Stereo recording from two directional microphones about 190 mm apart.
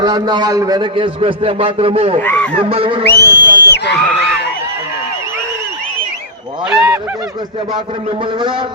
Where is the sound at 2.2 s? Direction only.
10° left (ahead or behind).